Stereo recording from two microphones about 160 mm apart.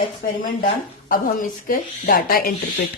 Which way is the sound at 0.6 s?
65° left (ahead or behind).